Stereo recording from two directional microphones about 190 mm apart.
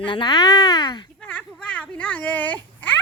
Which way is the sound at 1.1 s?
10° left (ahead or behind).